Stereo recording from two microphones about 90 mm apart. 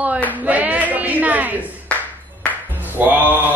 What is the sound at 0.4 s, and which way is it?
A woman's voice, 20° right (ahead or behind).